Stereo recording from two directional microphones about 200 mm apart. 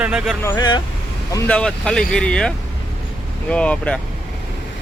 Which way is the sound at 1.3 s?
5° left (ahead or behind).